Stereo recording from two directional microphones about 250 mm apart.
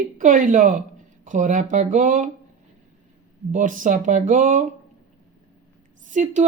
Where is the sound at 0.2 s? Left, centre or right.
Right.